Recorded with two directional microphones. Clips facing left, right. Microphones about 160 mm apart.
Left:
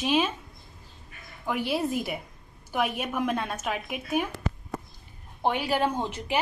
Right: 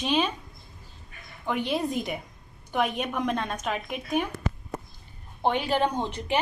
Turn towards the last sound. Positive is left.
turn(degrees=5)  # may be behind; listen again after turning